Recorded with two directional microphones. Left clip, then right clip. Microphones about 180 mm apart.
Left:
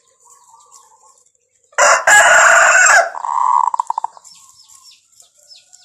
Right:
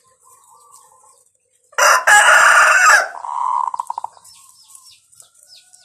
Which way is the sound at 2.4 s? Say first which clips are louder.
Left 1 dB; 60° right (ahead or behind).